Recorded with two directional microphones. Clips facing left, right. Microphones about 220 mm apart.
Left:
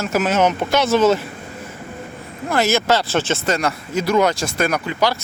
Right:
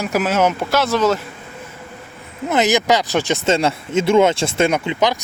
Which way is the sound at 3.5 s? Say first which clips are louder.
Right 4 dB; 25° right (ahead or behind).